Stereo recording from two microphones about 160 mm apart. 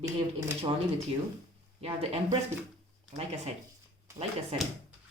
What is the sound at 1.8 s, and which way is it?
Speech, 35° right (ahead or behind).